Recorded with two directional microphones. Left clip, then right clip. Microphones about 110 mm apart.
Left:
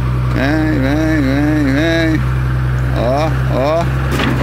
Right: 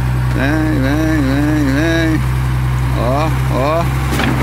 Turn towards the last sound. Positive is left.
turn(degrees=10)  # may be behind; listen again after turning